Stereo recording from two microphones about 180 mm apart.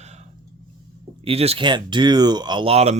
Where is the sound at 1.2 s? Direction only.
35° right (ahead or behind).